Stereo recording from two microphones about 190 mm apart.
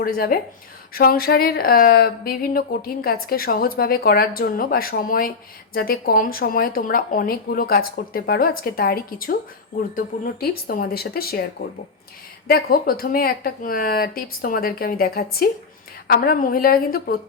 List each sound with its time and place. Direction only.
0.0 s speech: 50° left (ahead or behind)
12.5 s speech: 55° left (ahead or behind)